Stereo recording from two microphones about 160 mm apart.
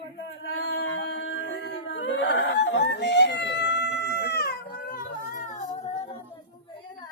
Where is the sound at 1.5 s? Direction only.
90° left; by 5.6 s 50° left (ahead or behind).